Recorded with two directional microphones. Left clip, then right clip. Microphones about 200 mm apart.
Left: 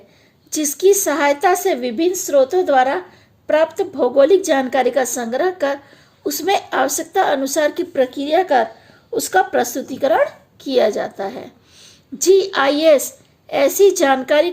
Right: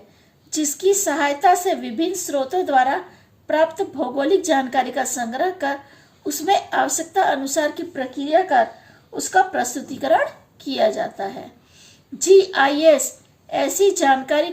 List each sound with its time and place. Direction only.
0.5 s a woman's voice: 45° left (ahead or behind)